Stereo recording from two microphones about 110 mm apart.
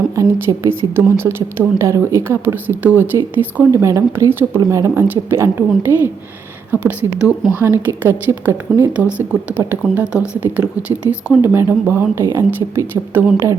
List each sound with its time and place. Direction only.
0.2 s a woman's voice: 25° right (ahead or behind)